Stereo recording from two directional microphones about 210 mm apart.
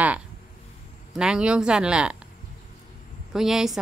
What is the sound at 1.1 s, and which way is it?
A woman's voice, 5° right (ahead or behind).